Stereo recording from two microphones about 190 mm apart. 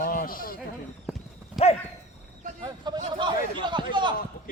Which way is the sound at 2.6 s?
25° right (ahead or behind).